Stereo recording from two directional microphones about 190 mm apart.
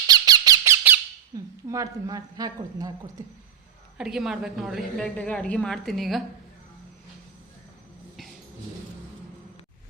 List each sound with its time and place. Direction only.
0.1 s squeak: 20° right (ahead or behind)
1.3 s a sound: 15° right (ahead or behind)
1.7 s speech: 20° right (ahead or behind)
3.9 s a woman's voice: 5° right (ahead or behind)